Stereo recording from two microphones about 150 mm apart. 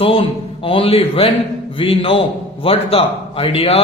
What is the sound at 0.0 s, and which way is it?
A man's voice, 35° left (ahead or behind).